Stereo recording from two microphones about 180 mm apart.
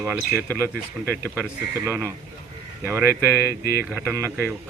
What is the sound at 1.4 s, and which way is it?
Speech, 15° right (ahead or behind).